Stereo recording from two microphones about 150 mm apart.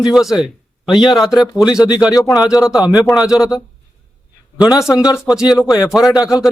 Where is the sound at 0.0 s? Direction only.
Centre (ahead or behind).